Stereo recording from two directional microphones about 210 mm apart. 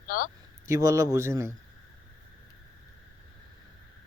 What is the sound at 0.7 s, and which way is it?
Speech, 15° right (ahead or behind).